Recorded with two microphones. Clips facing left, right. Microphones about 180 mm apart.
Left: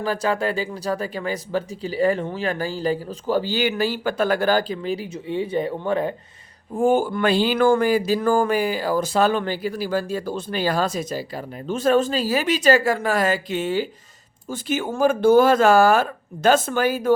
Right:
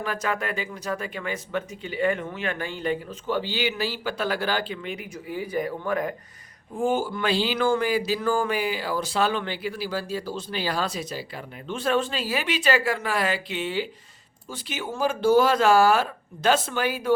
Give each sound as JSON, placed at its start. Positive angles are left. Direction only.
{"t": 0.0, "sound": "speech", "side_deg": 30}
{"t": 6.7, "sound": "speech", "side_deg": 50}